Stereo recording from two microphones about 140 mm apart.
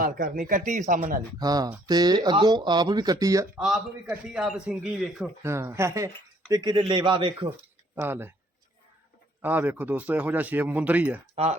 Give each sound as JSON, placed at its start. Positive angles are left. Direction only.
{"t": 0.0, "sound": "speech", "side_deg": -90}
{"t": 1.4, "sound": "speech", "side_deg": -25}
{"t": 4.1, "sound": "speech", "side_deg": -5}
{"t": 5.4, "sound": "a man's voice", "side_deg": -20}
{"t": 7.9, "sound": "speech", "side_deg": -15}
{"t": 9.4, "sound": "speech", "side_deg": -10}